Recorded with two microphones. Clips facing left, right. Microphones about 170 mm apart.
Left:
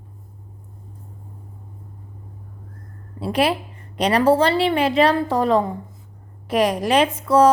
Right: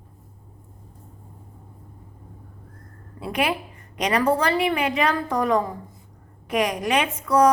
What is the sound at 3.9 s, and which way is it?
Speech, 30° left (ahead or behind).